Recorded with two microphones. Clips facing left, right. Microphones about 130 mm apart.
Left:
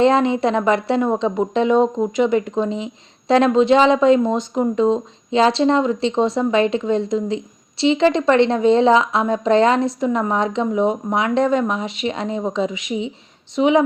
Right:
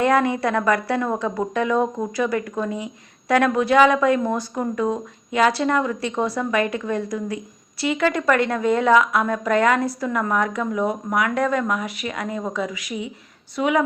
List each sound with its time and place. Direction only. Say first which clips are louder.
0.0 s a woman's voice: left 4 dB; 25° left (ahead or behind)